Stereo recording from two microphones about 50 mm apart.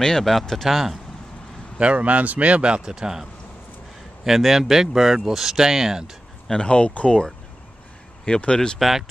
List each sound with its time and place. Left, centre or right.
0.2 s speech: centre
0.7 s speech: centre
1.8 s a man's voice: right; by 6.0 s centre
6.4 s speech: centre
8.3 s speech: left
8.7 s speech: centre